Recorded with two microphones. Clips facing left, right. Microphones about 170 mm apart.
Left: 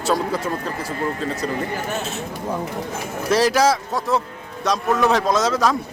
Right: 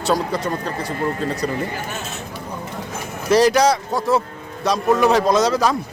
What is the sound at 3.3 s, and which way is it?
Speech, centre (ahead or behind).